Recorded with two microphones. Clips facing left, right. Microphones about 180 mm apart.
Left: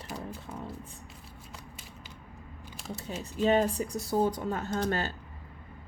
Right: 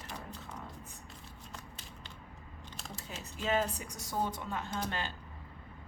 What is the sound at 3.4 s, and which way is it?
Speech, 35° left (ahead or behind).